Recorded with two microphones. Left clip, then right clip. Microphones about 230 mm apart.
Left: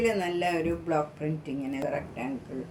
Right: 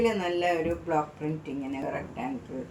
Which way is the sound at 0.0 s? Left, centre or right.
Left.